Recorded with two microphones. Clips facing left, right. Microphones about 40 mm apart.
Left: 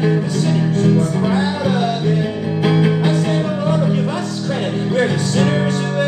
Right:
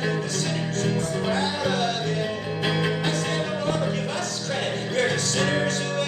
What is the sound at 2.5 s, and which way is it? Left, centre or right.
Music, centre.